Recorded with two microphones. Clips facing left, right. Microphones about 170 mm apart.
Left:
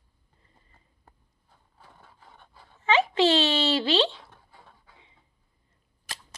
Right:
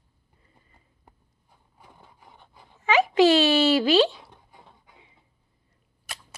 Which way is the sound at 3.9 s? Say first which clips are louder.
Right 5 dB; 10° right (ahead or behind).